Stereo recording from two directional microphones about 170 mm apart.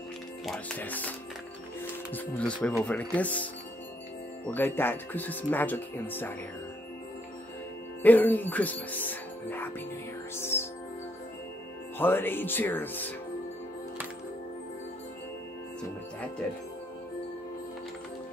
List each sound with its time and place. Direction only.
0.5 s speech: 5° left (ahead or behind)
2.1 s speech: 5° left (ahead or behind)
4.5 s speech: 10° left (ahead or behind)
8.0 s speech: 10° left (ahead or behind)
12.0 s speech: 10° left (ahead or behind)